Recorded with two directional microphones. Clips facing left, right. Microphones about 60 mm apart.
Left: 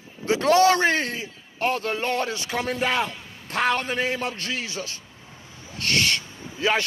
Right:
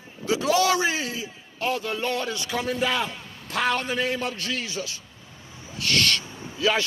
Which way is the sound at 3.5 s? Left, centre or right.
Left.